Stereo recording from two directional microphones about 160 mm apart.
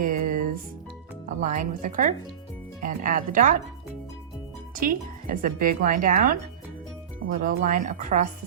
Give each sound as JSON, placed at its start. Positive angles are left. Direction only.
{"t": 0.0, "sound": "music", "side_deg": -60}
{"t": 1.4, "sound": "a woman's voice", "side_deg": -50}
{"t": 4.7, "sound": "speech", "side_deg": -60}
{"t": 7.4, "sound": "speech", "side_deg": -55}